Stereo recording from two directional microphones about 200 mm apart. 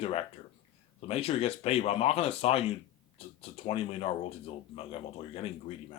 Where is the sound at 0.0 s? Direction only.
30° left (ahead or behind).